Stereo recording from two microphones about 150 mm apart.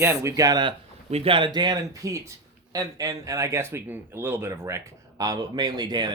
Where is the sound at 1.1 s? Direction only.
40° right (ahead or behind).